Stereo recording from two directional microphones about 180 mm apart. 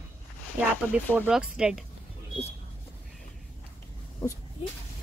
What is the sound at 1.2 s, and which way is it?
Speech, 5° right (ahead or behind).